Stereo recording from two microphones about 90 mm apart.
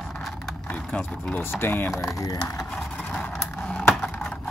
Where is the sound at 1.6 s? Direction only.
25° left (ahead or behind).